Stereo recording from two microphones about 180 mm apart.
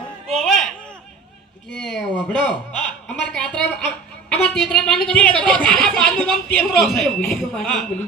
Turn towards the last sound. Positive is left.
turn(degrees=5)  # may be behind; listen again after turning